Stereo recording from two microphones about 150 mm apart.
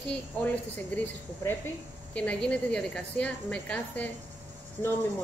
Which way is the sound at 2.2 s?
10° left (ahead or behind).